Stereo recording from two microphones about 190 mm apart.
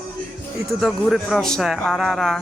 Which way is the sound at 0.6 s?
Centre (ahead or behind).